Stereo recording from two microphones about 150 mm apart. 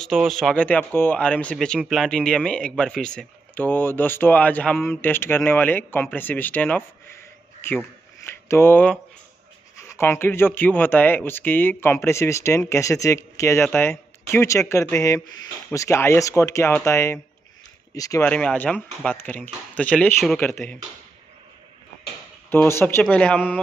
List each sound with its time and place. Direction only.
0.0 s speech: 5° left (ahead or behind)
9.9 s speech: 15° left (ahead or behind)
18.2 s speech: 10° left (ahead or behind)
22.5 s speech: 15° left (ahead or behind)